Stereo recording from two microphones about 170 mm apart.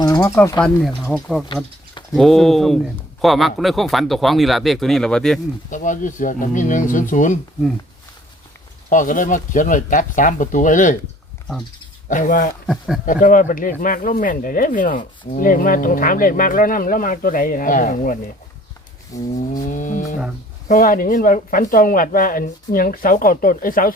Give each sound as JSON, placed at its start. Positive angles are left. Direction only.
{"t": 0.0, "sound": "speech", "side_deg": 20}
{"t": 0.6, "sound": "speech", "side_deg": 5}
{"t": 5.7, "sound": "speech", "side_deg": 50}
{"t": 8.9, "sound": "speech", "side_deg": 50}
{"t": 12.0, "sound": "speech", "side_deg": 50}
{"t": 12.6, "sound": "speech", "side_deg": 0}
{"t": 13.1, "sound": "speech", "side_deg": 50}
{"t": 19.1, "sound": "a sound", "side_deg": 20}
{"t": 19.6, "sound": "speech", "side_deg": 50}